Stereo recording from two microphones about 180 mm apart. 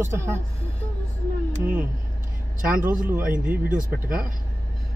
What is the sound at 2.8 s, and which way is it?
Speech, 50° right (ahead or behind).